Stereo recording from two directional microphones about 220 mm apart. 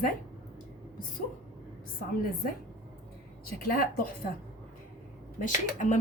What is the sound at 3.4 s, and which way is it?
Speech, 45° left (ahead or behind).